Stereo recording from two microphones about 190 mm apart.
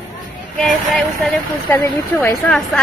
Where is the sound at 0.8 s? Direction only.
Centre (ahead or behind).